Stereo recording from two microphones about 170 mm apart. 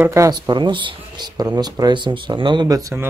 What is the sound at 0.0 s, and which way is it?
Speech, 15° right (ahead or behind).